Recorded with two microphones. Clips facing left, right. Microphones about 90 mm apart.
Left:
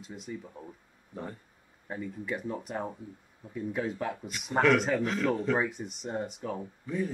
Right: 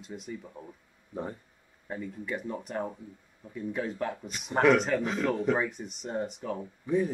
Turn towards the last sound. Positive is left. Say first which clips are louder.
# right 5 dB
turn(degrees=-20)  # may be behind; listen again after turning